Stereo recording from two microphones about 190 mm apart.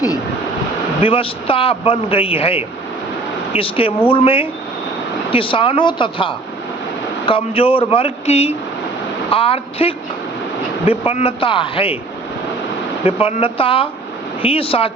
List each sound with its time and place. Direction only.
1.0 s speech: 30° left (ahead or behind)
13.1 s speech: 30° left (ahead or behind)